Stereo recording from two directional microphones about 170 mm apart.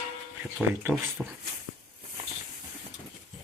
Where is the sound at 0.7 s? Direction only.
10° right (ahead or behind).